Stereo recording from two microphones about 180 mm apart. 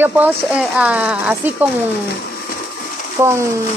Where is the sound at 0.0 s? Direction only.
10° right (ahead or behind).